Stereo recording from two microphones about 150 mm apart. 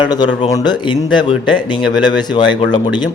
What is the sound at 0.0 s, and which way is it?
Speech, 30° left (ahead or behind).